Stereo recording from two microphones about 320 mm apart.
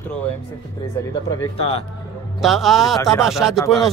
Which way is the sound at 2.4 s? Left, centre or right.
Centre.